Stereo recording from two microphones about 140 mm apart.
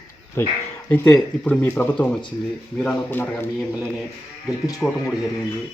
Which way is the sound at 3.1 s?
15° left (ahead or behind).